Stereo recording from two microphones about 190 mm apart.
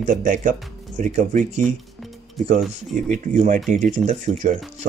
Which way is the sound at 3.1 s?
45° right (ahead or behind).